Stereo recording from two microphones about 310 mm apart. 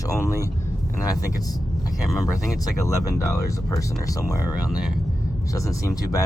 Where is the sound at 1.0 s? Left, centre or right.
Centre.